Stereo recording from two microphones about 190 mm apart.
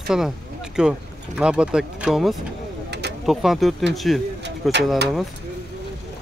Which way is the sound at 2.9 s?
60° right (ahead or behind).